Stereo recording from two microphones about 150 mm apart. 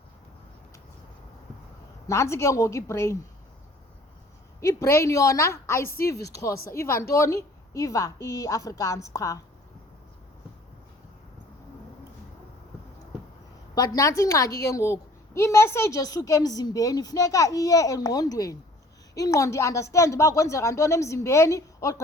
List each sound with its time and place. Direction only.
2.0 s a woman's voice: 20° left (ahead or behind)
4.6 s a woman's voice: 20° left (ahead or behind)
13.7 s a woman's voice: 25° left (ahead or behind)